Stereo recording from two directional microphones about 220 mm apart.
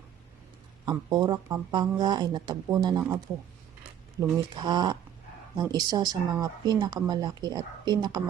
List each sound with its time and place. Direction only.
0.9 s speech: 20° right (ahead or behind)
4.2 s speech: 20° right (ahead or behind)